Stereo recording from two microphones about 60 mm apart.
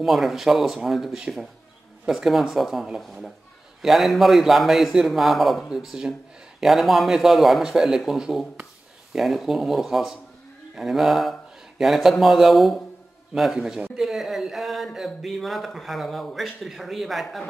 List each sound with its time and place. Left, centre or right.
0.0 s speech: centre